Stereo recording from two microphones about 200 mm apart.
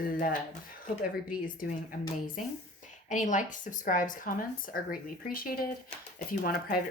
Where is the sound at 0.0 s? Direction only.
45° left (ahead or behind).